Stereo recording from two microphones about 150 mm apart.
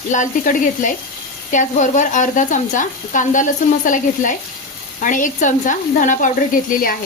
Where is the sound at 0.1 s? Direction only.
60° left (ahead or behind).